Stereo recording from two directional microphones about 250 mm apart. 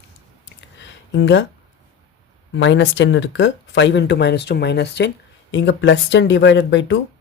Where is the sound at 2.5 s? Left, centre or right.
Left.